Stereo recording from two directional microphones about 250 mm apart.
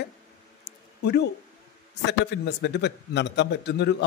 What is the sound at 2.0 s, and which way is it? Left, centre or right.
A man's voice, left.